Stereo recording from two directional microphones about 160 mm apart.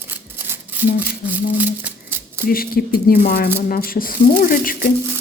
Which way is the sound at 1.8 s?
15° right (ahead or behind).